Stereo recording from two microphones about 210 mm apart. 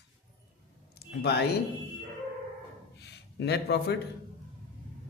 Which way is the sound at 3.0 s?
55° left (ahead or behind).